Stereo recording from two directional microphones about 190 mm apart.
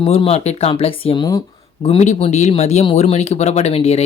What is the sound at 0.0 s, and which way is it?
Speech, 30° left (ahead or behind).